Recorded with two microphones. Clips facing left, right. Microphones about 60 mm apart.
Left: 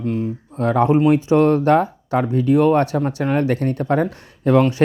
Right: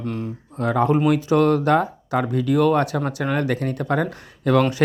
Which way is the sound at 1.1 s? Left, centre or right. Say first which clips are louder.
Left 3 dB; left.